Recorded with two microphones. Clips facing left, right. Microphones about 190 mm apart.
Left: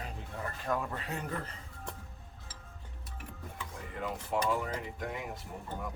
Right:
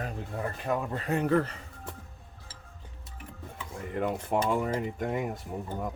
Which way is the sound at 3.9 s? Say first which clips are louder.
Right 6 dB; 55° right (ahead or behind).